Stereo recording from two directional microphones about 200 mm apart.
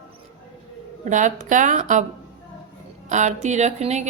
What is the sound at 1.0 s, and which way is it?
Speech, 40° right (ahead or behind).